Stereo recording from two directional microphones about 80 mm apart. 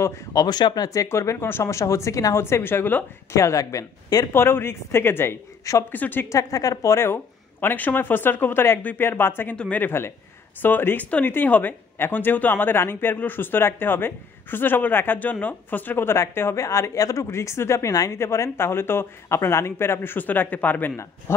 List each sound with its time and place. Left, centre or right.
0.0 s speech: left
0.4 s speech: left
1.0 s speech: left
2.4 s a woman's voice: left
3.3 s speech: left
4.3 s speech: left
5.9 s a woman's voice: left
6.2 s speech: left
7.6 s a woman's voice: left
21.3 s speech: left